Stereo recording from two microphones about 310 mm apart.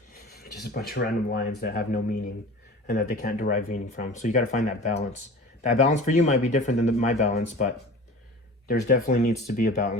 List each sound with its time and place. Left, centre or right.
0.3 s speech: left